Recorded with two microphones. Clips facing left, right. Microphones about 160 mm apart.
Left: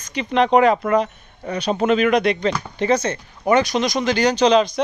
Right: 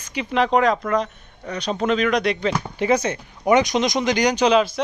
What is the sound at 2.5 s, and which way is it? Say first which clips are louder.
Speech: left 1 dB; 10° right (ahead or behind).